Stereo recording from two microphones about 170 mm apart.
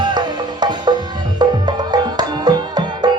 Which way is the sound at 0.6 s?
25° right (ahead or behind).